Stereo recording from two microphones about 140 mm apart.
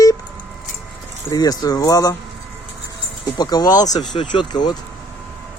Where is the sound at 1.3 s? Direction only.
25° left (ahead or behind).